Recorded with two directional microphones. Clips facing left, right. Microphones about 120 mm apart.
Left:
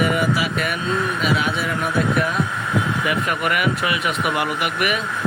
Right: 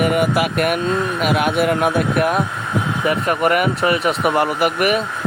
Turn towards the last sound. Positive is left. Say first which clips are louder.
# right 5 dB
turn(degrees=-40)  # may be behind; listen again after turning